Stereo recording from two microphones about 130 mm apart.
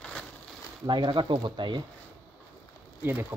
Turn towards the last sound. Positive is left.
turn(degrees=-15)  # may be behind; listen again after turning